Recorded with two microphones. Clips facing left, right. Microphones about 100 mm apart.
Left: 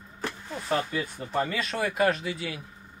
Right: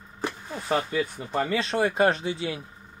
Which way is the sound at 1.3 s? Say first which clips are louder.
Right 1 dB; 30° right (ahead or behind).